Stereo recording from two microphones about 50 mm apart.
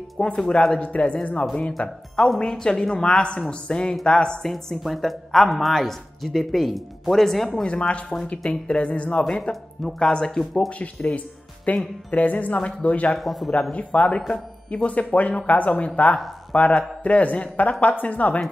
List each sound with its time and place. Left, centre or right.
0.4 s speech: centre
0.7 s speech: left; by 7.6 s centre
7.6 s speech: left
9.5 s speech: centre
10.7 s a woman's voice: left
13.2 s speech: centre
13.5 s speech: centre
14.3 s a man's voice: left